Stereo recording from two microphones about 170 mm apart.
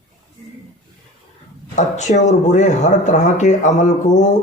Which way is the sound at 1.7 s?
45° left (ahead or behind).